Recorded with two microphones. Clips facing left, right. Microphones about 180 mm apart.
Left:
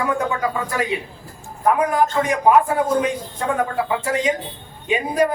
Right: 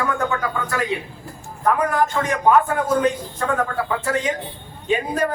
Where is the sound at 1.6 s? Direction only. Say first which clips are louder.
Left 2 dB; 10° left (ahead or behind).